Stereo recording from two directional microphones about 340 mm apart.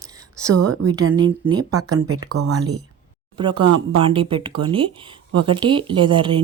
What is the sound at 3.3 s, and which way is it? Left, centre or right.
Speech, centre.